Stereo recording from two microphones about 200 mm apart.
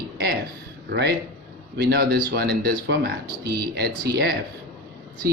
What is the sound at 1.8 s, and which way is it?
Speech, 55° right (ahead or behind).